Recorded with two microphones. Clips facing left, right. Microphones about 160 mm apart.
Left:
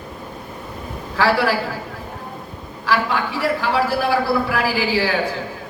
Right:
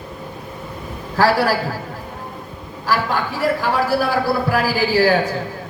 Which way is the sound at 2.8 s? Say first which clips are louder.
Even; 45° right (ahead or behind).